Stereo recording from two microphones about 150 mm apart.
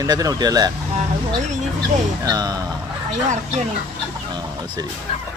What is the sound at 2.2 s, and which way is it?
Speech, 25° right (ahead or behind).